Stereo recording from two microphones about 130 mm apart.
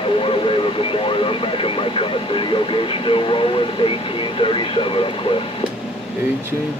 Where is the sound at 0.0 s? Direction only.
45° left (ahead or behind).